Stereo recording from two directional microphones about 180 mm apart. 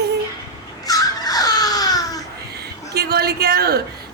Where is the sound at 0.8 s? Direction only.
20° left (ahead or behind).